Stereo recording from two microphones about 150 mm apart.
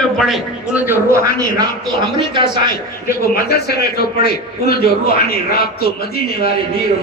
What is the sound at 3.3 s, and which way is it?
Speech, 90° left.